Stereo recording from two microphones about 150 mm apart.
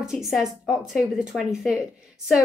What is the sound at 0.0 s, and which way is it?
Speech, centre (ahead or behind).